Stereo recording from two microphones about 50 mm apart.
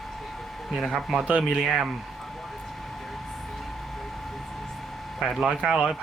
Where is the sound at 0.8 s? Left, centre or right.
Centre.